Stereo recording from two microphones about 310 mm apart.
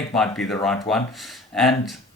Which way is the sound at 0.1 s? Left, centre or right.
Centre.